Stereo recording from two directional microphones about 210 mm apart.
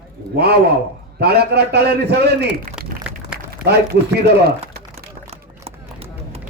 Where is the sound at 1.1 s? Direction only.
50° right (ahead or behind).